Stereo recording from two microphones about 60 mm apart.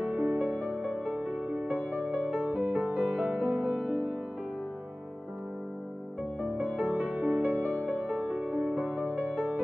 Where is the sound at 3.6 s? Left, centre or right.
Centre.